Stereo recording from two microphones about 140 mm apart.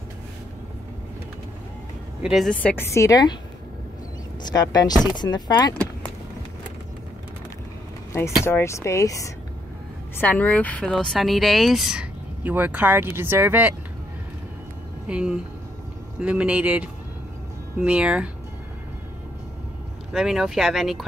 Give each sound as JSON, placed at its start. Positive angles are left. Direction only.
{"t": 2.2, "sound": "speech", "side_deg": 0}
{"t": 2.5, "sound": "speech", "side_deg": 10}
{"t": 4.4, "sound": "speech", "side_deg": 30}
{"t": 8.1, "sound": "speech", "side_deg": 15}
{"t": 10.1, "sound": "speech", "side_deg": 10}
{"t": 15.0, "sound": "speech", "side_deg": -5}
{"t": 20.1, "sound": "speech", "side_deg": -5}